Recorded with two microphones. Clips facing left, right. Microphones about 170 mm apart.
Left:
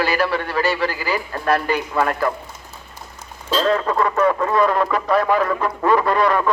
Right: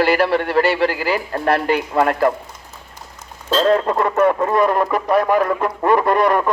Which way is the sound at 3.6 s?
30° right (ahead or behind).